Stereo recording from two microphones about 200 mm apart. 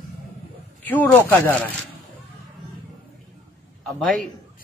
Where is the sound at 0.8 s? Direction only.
10° left (ahead or behind).